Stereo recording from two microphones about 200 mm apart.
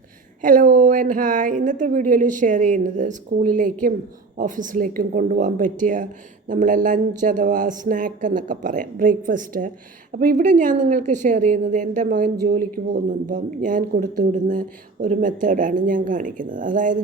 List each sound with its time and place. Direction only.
0.4 s a woman's voice: 40° right (ahead or behind)